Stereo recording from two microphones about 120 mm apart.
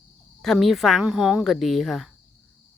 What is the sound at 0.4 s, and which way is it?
Speech, centre (ahead or behind).